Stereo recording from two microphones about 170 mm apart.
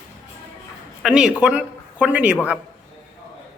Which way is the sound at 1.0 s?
5° right (ahead or behind).